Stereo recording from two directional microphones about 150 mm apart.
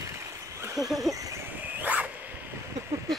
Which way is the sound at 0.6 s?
25° right (ahead or behind).